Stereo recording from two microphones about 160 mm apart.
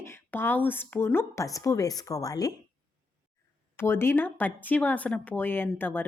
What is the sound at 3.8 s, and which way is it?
A woman's voice, 15° left (ahead or behind).